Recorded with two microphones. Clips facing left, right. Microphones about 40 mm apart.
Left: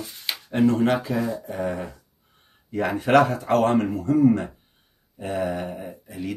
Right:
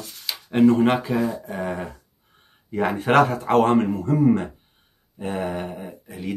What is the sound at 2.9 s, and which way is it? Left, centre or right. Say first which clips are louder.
Speech: even; right.